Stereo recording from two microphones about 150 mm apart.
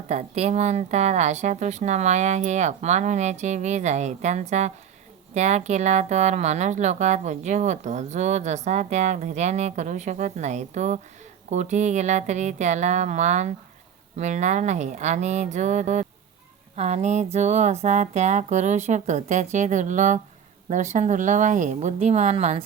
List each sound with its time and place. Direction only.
0.1 s speech: 50° right (ahead or behind)